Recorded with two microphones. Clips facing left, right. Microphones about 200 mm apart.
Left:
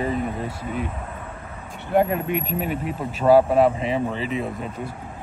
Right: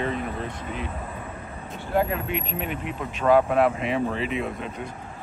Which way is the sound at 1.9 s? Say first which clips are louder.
Left 4 dB; 45° left (ahead or behind).